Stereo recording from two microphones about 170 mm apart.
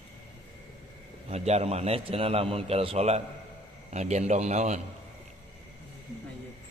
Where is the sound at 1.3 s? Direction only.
40° right (ahead or behind).